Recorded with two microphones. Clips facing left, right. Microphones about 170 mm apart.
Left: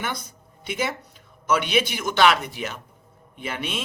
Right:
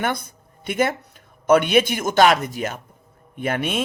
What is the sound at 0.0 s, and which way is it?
A man's voice, 55° right (ahead or behind).